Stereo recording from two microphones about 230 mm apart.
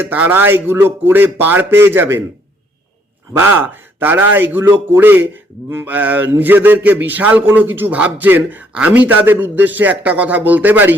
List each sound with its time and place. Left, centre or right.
0.0 s a man's voice: centre
3.3 s a man's voice: centre